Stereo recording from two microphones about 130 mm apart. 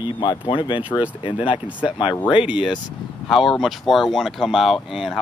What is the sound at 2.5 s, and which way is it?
Speech, 10° right (ahead or behind).